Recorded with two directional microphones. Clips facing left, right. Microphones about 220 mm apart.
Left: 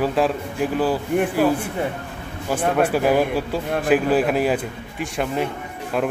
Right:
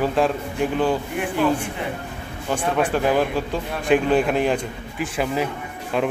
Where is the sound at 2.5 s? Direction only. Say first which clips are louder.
Left 2 dB; 5° left (ahead or behind).